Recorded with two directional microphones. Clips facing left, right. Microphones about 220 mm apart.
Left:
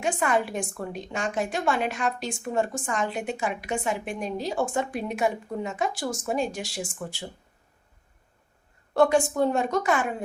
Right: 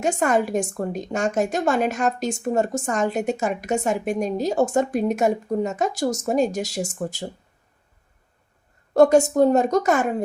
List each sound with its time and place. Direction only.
0.0 s a woman's voice: 45° right (ahead or behind)
8.9 s a woman's voice: 40° right (ahead or behind)